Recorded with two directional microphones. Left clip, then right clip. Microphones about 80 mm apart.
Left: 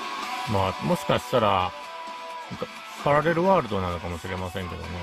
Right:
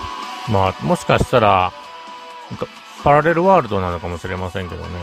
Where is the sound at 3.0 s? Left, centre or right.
Right.